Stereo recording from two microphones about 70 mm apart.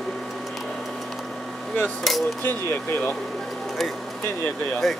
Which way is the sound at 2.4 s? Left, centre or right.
Left.